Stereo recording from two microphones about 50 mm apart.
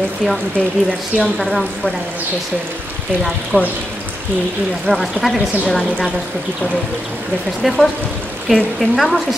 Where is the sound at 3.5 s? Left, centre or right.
Right.